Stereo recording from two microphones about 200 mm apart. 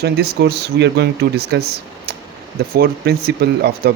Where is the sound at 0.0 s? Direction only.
55° right (ahead or behind).